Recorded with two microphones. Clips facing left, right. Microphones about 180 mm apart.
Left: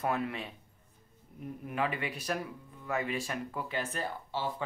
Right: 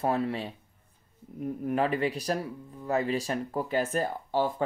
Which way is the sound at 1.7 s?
40° right (ahead or behind).